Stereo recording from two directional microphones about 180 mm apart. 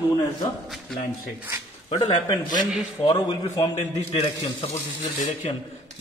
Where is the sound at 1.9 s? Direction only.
30° left (ahead or behind).